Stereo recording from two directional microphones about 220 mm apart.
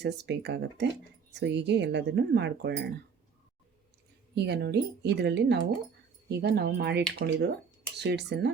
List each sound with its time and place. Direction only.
0.0 s speech: 50° right (ahead or behind)
4.4 s speech: 50° right (ahead or behind)